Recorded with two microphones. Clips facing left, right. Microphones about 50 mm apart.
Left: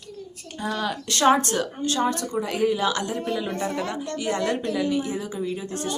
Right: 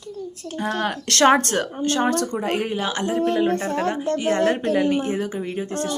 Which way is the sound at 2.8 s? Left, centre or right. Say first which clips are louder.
Right 2 dB; right.